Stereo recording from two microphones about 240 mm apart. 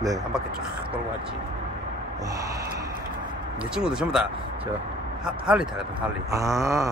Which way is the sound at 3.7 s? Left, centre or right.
Centre.